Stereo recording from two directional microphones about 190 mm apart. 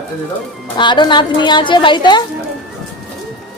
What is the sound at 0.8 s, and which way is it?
A woman's voice, 25° left (ahead or behind).